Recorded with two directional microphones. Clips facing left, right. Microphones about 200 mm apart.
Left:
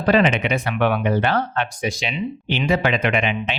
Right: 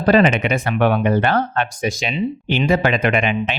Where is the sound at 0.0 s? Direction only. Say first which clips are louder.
Right 3 dB; 40° right (ahead or behind).